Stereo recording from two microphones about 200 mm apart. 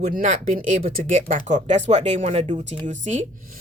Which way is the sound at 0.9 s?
40° right (ahead or behind).